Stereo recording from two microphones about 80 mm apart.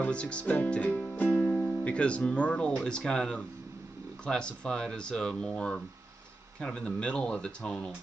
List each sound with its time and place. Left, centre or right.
0.0 s speech: centre